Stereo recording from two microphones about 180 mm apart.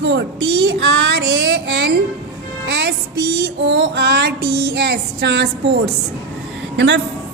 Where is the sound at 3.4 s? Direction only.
80° right.